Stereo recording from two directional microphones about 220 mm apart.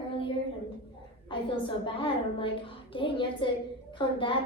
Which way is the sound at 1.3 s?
25° left (ahead or behind).